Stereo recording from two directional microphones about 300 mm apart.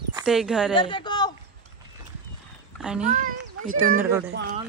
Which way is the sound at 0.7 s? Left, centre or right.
Centre.